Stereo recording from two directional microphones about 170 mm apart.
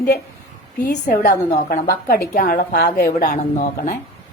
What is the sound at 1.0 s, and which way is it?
A woman's voice, 60° left (ahead or behind).